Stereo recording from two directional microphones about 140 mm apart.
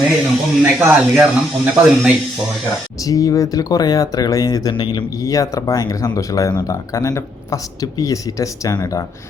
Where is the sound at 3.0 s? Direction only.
25° left (ahead or behind).